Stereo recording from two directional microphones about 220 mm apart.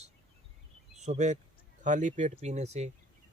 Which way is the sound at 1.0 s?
30° right (ahead or behind).